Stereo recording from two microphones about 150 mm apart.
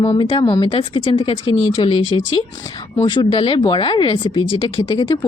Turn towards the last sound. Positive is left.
turn(degrees=30)  # may be behind; listen again after turning